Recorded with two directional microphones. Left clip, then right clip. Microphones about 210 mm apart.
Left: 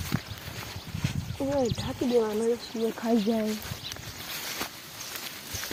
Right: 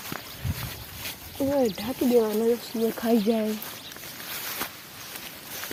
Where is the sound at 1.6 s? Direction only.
35° right (ahead or behind).